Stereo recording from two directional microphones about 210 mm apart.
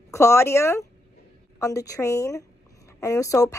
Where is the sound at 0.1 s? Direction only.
15° left (ahead or behind).